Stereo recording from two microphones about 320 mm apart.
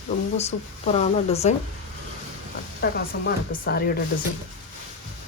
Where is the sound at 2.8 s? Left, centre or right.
Left.